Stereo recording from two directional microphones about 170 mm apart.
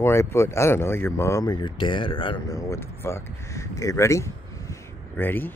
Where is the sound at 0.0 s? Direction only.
15° left (ahead or behind).